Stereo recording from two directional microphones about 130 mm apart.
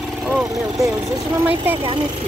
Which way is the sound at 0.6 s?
5° right (ahead or behind).